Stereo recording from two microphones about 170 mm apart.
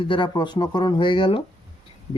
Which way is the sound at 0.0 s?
30° left (ahead or behind).